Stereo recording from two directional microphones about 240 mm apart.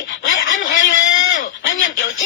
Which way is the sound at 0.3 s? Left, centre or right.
Left.